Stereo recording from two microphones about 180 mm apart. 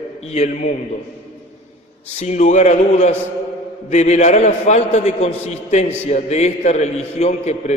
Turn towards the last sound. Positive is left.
turn(degrees=40)  # may be behind; listen again after turning